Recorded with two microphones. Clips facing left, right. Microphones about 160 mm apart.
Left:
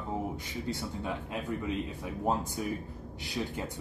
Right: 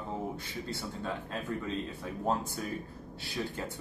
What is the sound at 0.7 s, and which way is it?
Speech, 15° left (ahead or behind).